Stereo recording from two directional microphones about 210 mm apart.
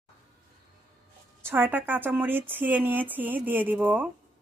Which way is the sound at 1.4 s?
10° right (ahead or behind).